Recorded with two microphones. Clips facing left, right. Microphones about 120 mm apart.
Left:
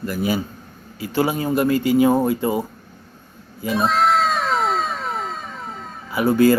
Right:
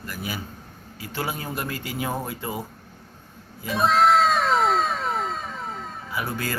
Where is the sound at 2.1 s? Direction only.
25° left (ahead or behind).